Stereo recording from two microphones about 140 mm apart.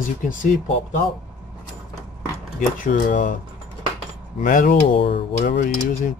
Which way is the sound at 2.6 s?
70° left (ahead or behind).